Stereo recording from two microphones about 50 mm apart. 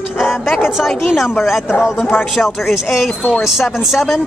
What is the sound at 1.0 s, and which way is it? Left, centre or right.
Speech, centre.